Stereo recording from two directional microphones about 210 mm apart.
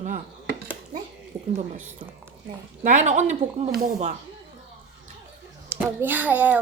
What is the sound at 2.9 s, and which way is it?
Speech, 35° right (ahead or behind).